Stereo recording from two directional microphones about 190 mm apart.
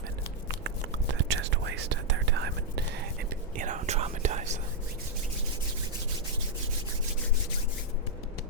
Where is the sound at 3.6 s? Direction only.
40° right (ahead or behind).